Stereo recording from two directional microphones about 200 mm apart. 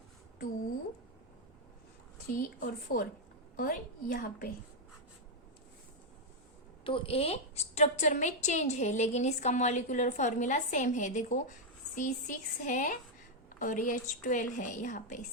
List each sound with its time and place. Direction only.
2.3 s a woman's voice: 45° left (ahead or behind)
6.8 s a woman's voice: 25° left (ahead or behind)